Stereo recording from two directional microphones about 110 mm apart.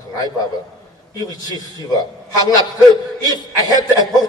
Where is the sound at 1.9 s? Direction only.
35° left (ahead or behind).